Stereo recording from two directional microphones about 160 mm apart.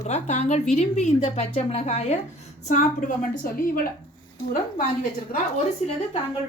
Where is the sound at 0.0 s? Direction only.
45° left (ahead or behind); by 3.8 s 60° left (ahead or behind).